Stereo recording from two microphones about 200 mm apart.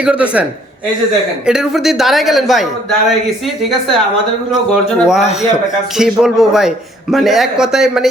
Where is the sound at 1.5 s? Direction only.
Centre (ahead or behind).